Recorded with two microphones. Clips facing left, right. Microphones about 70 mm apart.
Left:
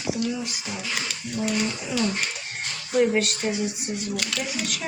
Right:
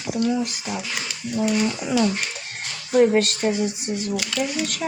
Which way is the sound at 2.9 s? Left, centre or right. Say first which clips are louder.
Right 5 dB; right.